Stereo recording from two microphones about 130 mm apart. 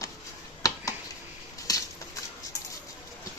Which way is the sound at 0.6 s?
25° left (ahead or behind).